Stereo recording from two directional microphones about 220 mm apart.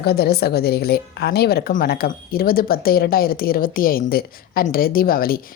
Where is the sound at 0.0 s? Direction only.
45° left (ahead or behind).